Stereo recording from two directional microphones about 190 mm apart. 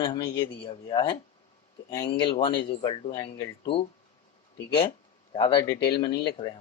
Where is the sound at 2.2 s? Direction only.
25° left (ahead or behind).